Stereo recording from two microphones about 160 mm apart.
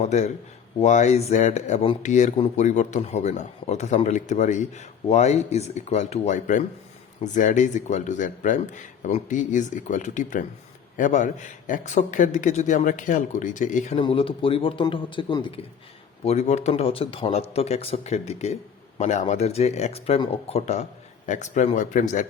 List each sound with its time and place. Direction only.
0.0 s speech: 45° left (ahead or behind)
14.0 s speech: 35° left (ahead or behind)
16.2 s speech: 45° left (ahead or behind)